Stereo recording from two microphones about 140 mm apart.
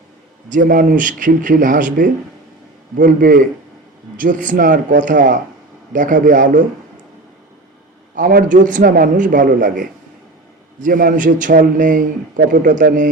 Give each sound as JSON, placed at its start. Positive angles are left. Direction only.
{"t": 0.5, "sound": "a man's voice", "side_deg": -75}
{"t": 4.2, "sound": "a man's voice", "side_deg": -70}
{"t": 8.1, "sound": "a man's voice", "side_deg": -80}